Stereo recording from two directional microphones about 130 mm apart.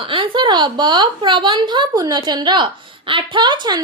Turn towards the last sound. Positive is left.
turn(degrees=-35)  # may be behind; listen again after turning